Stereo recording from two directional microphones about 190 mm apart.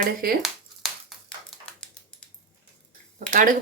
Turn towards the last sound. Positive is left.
turn(degrees=-45)  # may be behind; listen again after turning